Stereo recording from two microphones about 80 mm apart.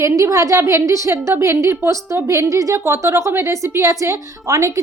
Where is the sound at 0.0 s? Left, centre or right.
Right.